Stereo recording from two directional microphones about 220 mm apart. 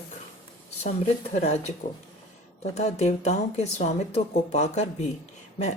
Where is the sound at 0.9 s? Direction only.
30° left (ahead or behind).